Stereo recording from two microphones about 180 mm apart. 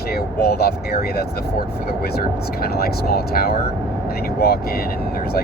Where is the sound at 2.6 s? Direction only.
60° left (ahead or behind).